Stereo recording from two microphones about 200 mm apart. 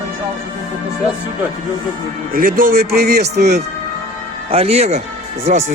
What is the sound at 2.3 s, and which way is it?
Speech, 45° right (ahead or behind).